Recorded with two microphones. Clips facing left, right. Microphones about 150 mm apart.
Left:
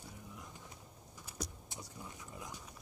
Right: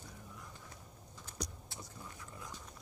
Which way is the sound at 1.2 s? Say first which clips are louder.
Even; 10° left (ahead or behind).